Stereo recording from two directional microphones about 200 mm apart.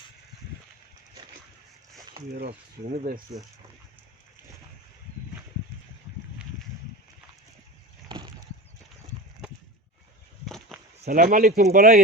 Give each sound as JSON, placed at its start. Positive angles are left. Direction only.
{"t": 2.3, "sound": "speech", "side_deg": -50}
{"t": 10.4, "sound": "a sound", "side_deg": 0}
{"t": 11.1, "sound": "speech", "side_deg": -45}